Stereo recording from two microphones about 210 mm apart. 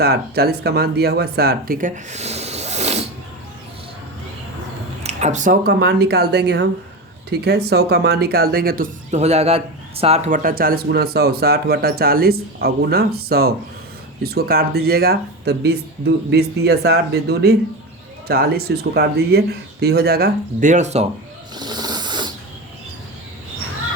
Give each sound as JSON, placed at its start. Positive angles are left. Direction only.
{"t": 0.0, "sound": "speech", "side_deg": -50}
{"t": 5.0, "sound": "speech", "side_deg": -35}
{"t": 21.5, "sound": "rub", "side_deg": -20}